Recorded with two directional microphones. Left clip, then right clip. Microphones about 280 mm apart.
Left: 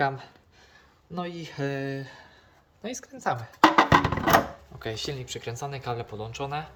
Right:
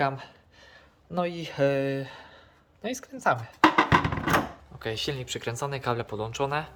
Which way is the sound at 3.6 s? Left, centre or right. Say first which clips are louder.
Left 2 dB; left.